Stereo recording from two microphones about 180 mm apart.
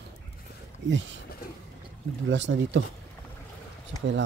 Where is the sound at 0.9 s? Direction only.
90° right.